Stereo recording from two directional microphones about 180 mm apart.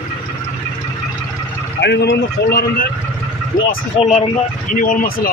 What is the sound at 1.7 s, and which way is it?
A man's voice, 70° left (ahead or behind).